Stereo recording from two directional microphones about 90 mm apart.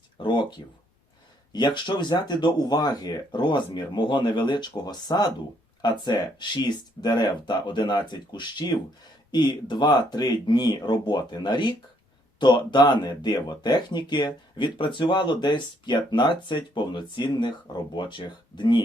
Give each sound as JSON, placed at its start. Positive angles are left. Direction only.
{"t": 0.2, "sound": "speech", "side_deg": 65}